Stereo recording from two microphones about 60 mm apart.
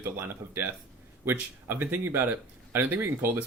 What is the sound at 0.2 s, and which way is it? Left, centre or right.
A man's voice, right.